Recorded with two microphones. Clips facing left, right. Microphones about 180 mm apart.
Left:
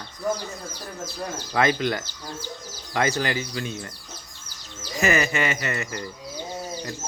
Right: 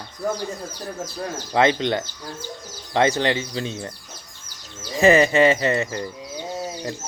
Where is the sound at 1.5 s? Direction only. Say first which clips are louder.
Right 4 dB; 25° right (ahead or behind).